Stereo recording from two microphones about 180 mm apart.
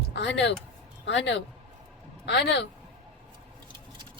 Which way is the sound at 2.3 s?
70° left (ahead or behind).